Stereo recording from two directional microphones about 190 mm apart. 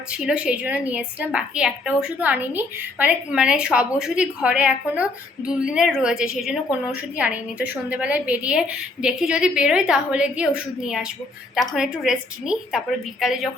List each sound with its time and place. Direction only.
0.1 s a woman's voice: 5° right (ahead or behind)